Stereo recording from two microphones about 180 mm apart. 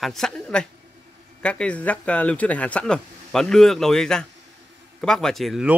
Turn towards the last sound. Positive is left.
turn(degrees=0)  # may be behind; listen again after turning